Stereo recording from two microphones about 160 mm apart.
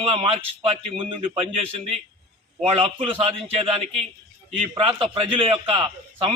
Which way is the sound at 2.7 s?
35° right (ahead or behind).